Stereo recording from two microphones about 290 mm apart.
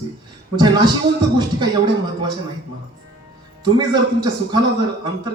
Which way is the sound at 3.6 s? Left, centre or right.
Centre.